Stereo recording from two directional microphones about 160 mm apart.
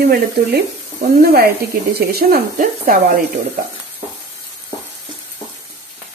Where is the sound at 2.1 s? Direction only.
70° right (ahead or behind).